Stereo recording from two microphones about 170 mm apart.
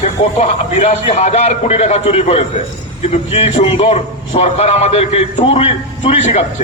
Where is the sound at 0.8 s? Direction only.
40° left (ahead or behind).